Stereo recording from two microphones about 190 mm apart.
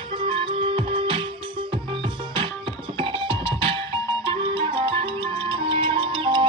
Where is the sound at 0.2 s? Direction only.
30° right (ahead or behind).